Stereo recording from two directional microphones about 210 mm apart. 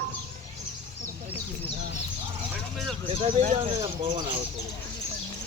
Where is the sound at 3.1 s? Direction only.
30° right (ahead or behind).